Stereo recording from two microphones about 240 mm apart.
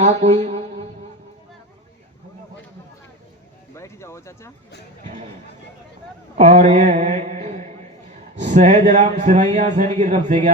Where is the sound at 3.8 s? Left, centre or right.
Centre.